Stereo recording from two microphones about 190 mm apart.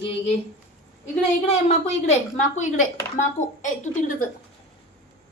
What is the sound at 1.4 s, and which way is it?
A woman's voice, 35° left (ahead or behind).